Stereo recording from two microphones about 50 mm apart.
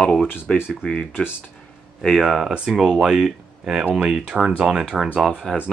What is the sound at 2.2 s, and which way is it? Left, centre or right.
Speech, centre.